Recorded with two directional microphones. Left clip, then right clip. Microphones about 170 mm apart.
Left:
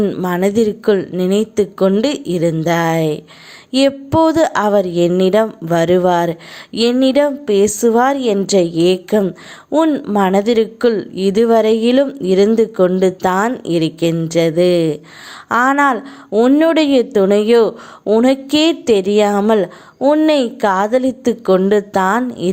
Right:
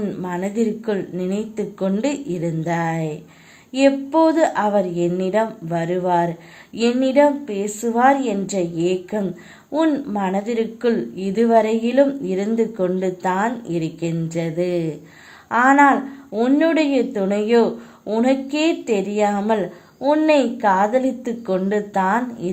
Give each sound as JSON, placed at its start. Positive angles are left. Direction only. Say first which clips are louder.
{"t": 0.0, "sound": "a woman's voice", "louder": "left 9 dB", "side_deg": 35}